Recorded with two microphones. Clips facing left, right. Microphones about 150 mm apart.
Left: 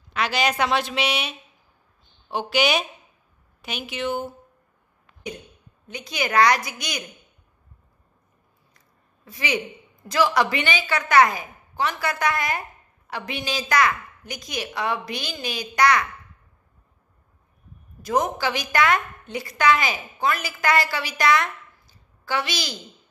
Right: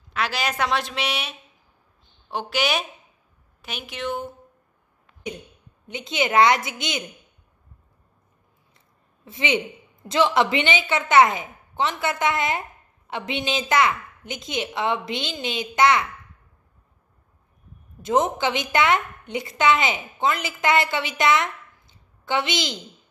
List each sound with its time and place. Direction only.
0.1 s a woman's voice: centre (ahead or behind)
5.9 s a woman's voice: 25° right (ahead or behind)
8.7 s a woman's voice: 25° right (ahead or behind)
18.0 s a woman's voice: 25° right (ahead or behind)